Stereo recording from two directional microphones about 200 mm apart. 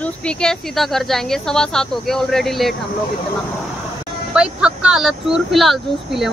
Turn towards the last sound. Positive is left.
turn(degrees=0)  # may be behind; listen again after turning